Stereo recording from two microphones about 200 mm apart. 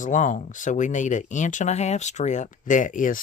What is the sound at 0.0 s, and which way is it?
Speech, 40° left (ahead or behind).